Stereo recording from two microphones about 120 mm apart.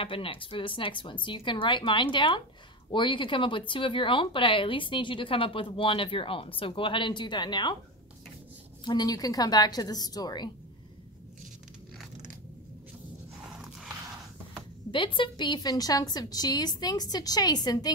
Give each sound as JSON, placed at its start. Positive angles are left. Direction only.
{"t": 0.0, "sound": "speech", "side_deg": 50}
{"t": 8.8, "sound": "a woman's voice", "side_deg": 35}
{"t": 14.9, "sound": "a woman's voice", "side_deg": 45}